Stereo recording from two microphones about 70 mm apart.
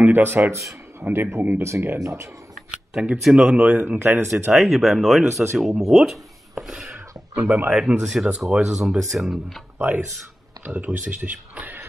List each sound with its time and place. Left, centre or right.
0.0 s speech: right
1.6 s speech: right
2.7 s a sound: centre
3.2 s speech: centre
4.0 s speech: right
4.5 s speech: centre
5.3 s speech: right
5.6 s speech: centre
7.3 s speech: right
7.7 s speech: centre
9.8 s speech: right